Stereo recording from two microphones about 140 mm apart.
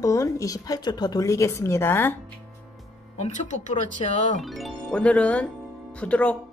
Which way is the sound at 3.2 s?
60° left (ahead or behind).